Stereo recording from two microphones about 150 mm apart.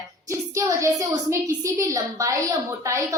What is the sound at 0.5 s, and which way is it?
A woman's voice, 20° right (ahead or behind).